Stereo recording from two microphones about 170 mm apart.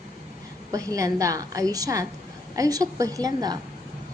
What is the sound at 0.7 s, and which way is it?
A woman's voice, 20° right (ahead or behind).